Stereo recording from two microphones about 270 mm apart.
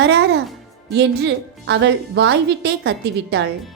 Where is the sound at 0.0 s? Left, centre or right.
Right.